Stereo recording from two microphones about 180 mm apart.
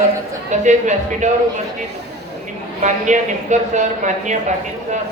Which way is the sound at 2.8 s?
40° right (ahead or behind).